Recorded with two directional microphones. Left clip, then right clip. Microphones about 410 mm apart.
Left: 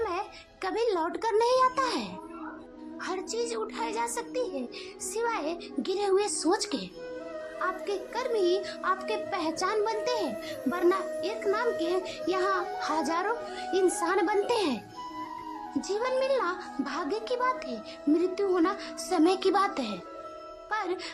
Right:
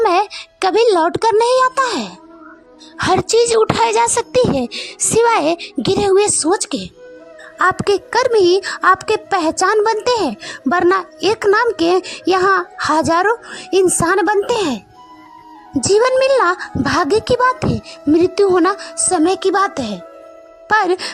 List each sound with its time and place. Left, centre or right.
0.0 s a child's voice: right
15.8 s a child's voice: centre